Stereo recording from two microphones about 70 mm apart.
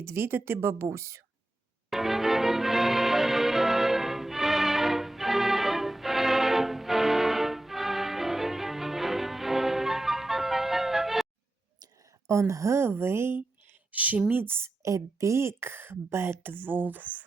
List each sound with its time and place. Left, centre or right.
0.0 s speech: right
1.9 s music: centre
12.3 s speech: right
14.8 s speech: right